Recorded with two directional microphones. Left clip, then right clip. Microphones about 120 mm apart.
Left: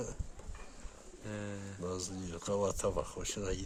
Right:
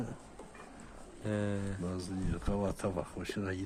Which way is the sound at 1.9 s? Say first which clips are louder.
Right 1 dB; 55° left (ahead or behind).